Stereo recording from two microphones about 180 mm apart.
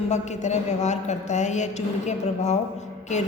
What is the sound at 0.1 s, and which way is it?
A woman's voice, 40° left (ahead or behind).